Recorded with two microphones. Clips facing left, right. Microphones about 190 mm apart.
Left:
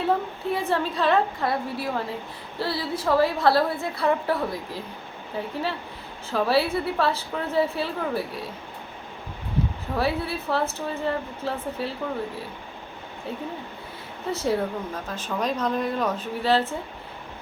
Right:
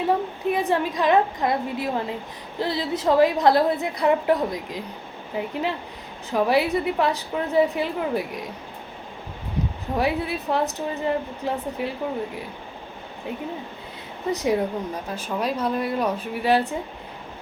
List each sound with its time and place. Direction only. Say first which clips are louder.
0.4 s speech: right 3 dB; 15° right (ahead or behind)
9.9 s speech: right 2 dB; 15° right (ahead or behind)
14.3 s speech: right 2 dB; 15° right (ahead or behind)